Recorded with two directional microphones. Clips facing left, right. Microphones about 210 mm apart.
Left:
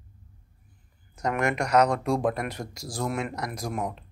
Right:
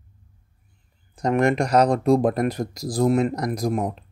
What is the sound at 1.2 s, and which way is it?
Speech, 30° right (ahead or behind).